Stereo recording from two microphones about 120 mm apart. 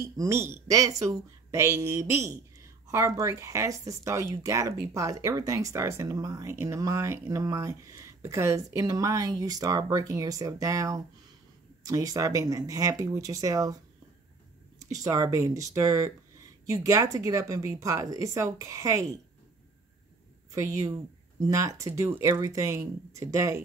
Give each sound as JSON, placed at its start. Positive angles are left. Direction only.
{"t": 0.0, "sound": "speech", "side_deg": -25}
{"t": 14.9, "sound": "speech", "side_deg": -30}
{"t": 20.5, "sound": "speech", "side_deg": -25}